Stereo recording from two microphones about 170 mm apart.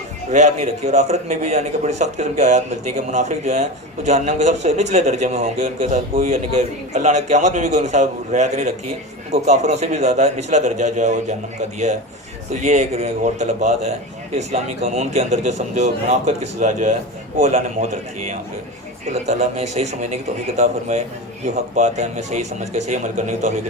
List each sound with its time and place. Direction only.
0.3 s a man's voice: 45° right (ahead or behind)
12.6 s a man's voice: 40° right (ahead or behind)